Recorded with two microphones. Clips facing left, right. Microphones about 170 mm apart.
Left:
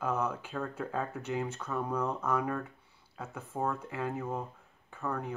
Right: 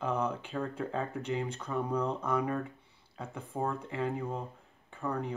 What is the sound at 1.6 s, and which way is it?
Speech, 10° right (ahead or behind).